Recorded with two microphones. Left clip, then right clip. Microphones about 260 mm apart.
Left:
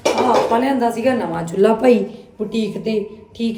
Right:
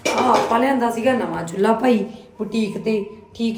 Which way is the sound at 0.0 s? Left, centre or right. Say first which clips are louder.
Left 2 dB; centre.